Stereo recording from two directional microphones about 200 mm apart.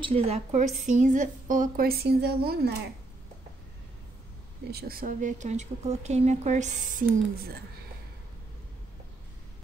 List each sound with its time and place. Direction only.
0.0 s speech: 30° right (ahead or behind); by 2.7 s 50° right (ahead or behind)
4.6 s speech: 50° right (ahead or behind)